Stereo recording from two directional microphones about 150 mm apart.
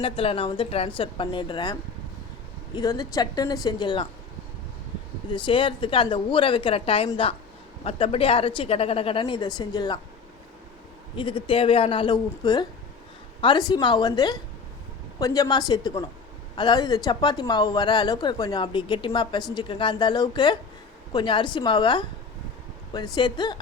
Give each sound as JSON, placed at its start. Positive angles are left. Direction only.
{"t": 0.0, "sound": "a woman's voice", "side_deg": 40}
{"t": 5.3, "sound": "a woman's voice", "side_deg": 35}
{"t": 11.2, "sound": "a woman's voice", "side_deg": 35}
{"t": 23.1, "sound": "speech", "side_deg": 30}